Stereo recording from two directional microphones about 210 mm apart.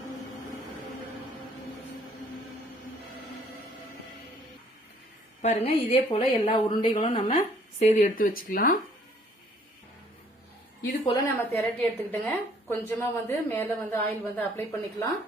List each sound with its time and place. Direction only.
5.4 s a woman's voice: 30° left (ahead or behind)
11.3 s a woman's voice: 10° left (ahead or behind)